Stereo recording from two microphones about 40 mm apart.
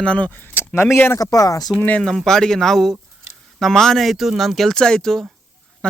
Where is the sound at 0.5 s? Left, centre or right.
Left.